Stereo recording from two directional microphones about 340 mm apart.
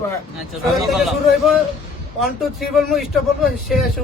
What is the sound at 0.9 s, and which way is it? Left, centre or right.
Speech, centre.